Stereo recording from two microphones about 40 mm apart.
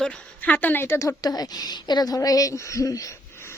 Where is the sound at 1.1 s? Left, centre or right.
Left.